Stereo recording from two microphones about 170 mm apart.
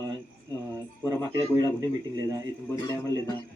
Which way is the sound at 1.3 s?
25° right (ahead or behind).